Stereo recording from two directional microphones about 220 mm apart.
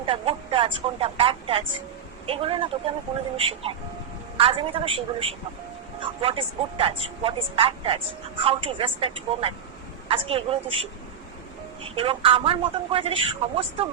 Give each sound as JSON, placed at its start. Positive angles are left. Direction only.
{"t": 0.0, "sound": "speech", "side_deg": -25}